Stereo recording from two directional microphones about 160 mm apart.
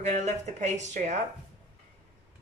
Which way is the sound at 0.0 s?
45° right (ahead or behind).